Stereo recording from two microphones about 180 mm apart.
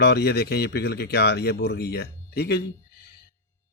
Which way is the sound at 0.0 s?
65° left (ahead or behind).